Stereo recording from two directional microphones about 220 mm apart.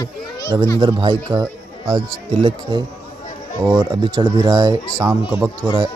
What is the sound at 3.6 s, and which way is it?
Speech, 15° right (ahead or behind).